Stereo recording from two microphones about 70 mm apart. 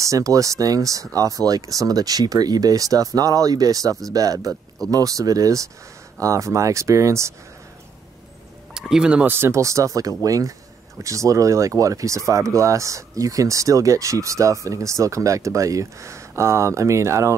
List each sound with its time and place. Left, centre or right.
0.0 s speech: right
8.7 s speech: centre
9.2 s speech: right